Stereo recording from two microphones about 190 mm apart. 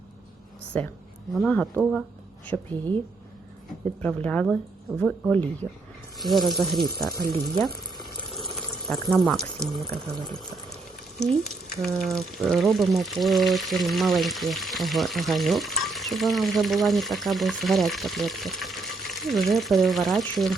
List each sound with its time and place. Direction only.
0.7 s speech: 10° left (ahead or behind)
4.0 s speech: 10° left (ahead or behind)
7.2 s speech: 25° right (ahead or behind)
8.3 s water: centre (ahead or behind)
9.2 s speech: centre (ahead or behind)
9.7 s speech: 25° right (ahead or behind)
11.3 s speech: centre (ahead or behind)